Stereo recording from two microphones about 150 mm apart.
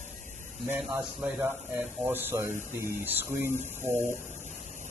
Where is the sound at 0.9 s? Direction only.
10° right (ahead or behind).